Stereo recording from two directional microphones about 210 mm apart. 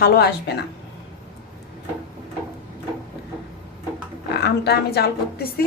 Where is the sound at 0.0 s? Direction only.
50° left (ahead or behind).